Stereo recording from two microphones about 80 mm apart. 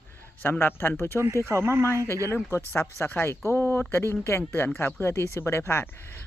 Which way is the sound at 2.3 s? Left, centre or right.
Left.